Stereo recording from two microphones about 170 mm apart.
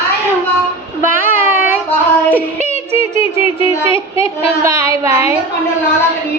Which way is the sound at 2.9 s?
15° right (ahead or behind).